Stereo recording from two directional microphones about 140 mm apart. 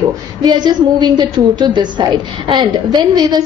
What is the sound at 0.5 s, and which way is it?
A woman's voice, 30° right (ahead or behind).